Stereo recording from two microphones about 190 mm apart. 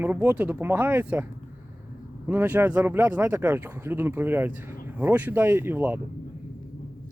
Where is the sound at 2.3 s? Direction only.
10° right (ahead or behind).